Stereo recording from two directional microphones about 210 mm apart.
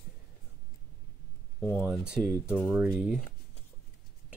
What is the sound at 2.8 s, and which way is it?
Speech, 5° right (ahead or behind).